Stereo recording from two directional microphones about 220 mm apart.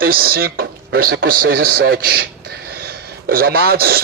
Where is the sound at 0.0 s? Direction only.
40° right (ahead or behind).